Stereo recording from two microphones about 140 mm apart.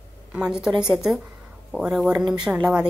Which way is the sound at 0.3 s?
5° right (ahead or behind).